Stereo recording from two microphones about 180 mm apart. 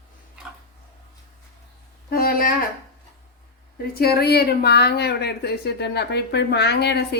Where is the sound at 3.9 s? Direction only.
60° left (ahead or behind).